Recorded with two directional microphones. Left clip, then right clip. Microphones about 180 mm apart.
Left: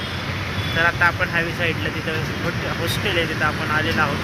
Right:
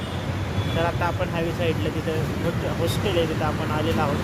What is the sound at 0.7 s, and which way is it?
Speech, 15° right (ahead or behind).